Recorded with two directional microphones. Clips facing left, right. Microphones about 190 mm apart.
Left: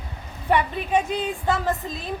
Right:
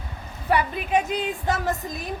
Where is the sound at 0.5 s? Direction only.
10° right (ahead or behind).